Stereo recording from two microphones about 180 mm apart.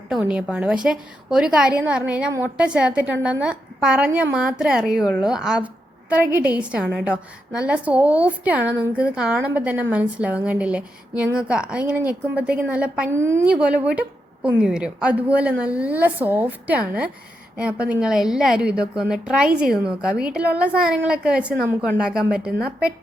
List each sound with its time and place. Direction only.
0.1 s a woman's voice: 5° right (ahead or behind)